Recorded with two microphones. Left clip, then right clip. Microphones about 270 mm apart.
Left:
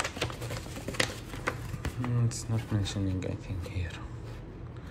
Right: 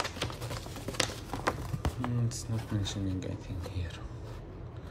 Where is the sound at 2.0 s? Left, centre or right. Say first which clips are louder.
Left 1 dB; centre.